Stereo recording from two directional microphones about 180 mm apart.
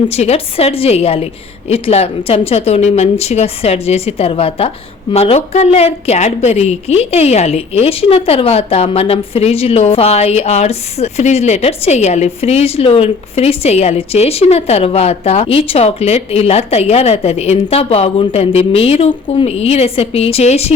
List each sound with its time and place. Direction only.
0.1 s a woman's voice: 35° left (ahead or behind)